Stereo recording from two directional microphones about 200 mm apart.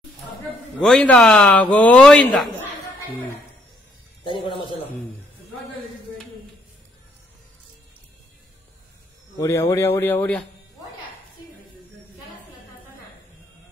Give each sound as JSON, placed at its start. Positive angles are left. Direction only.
{"t": 0.7, "sound": "speech", "side_deg": 5}
{"t": 4.2, "sound": "a man's voice", "side_deg": 25}
{"t": 9.4, "sound": "a man's voice", "side_deg": 15}